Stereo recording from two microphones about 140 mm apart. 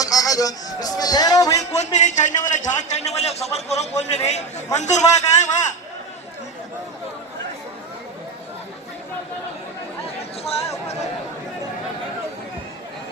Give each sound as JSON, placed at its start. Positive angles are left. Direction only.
{"t": 0.0, "sound": "speech", "side_deg": 25}
{"t": 1.7, "sound": "a man's voice", "side_deg": 55}